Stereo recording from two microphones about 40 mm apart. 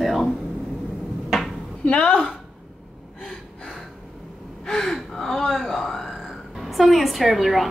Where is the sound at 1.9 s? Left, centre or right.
Left.